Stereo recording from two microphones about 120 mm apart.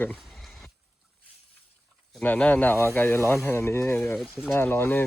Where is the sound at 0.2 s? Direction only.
Centre (ahead or behind).